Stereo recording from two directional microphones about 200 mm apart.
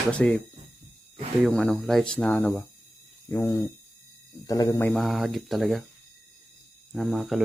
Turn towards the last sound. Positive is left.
turn(degrees=0)  # may be behind; listen again after turning